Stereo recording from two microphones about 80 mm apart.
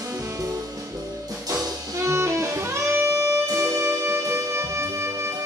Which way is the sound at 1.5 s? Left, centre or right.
Right.